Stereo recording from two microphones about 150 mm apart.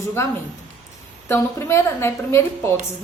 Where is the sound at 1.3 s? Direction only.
15° left (ahead or behind).